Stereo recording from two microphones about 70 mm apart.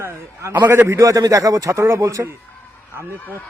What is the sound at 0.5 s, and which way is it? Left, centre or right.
Speech, right.